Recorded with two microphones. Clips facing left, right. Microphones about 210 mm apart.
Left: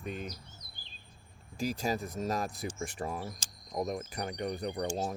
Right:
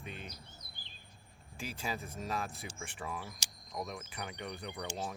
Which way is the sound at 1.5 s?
40° left (ahead or behind).